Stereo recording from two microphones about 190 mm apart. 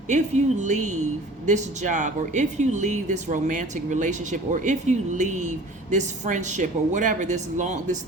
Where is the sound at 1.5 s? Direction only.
40° right (ahead or behind).